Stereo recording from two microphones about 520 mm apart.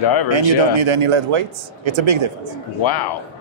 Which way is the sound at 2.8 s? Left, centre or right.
Left.